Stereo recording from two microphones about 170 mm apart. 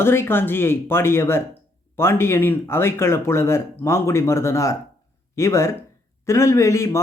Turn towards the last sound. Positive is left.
turn(degrees=15)  # may be behind; listen again after turning